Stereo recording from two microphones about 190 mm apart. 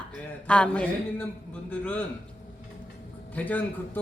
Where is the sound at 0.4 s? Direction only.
5° left (ahead or behind).